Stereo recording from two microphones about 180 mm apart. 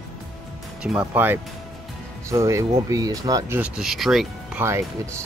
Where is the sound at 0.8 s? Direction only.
5° right (ahead or behind).